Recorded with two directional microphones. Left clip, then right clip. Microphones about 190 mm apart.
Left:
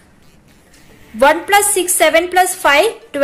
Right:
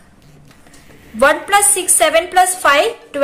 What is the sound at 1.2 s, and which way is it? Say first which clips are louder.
A woman's voice: left 1 dB; 15° left (ahead or behind).